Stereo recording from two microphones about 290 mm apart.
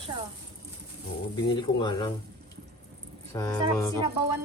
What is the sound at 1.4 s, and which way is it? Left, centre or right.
Speech, centre.